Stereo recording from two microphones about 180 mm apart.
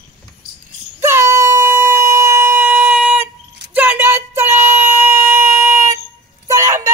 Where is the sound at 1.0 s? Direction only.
15° right (ahead or behind).